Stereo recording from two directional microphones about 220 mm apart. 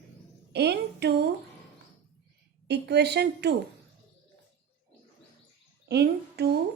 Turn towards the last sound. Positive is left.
turn(degrees=-50)  # may be behind; listen again after turning